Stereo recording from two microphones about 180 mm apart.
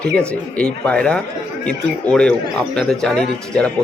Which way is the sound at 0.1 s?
5° left (ahead or behind).